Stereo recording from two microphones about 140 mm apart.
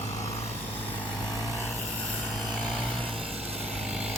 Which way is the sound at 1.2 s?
25° left (ahead or behind).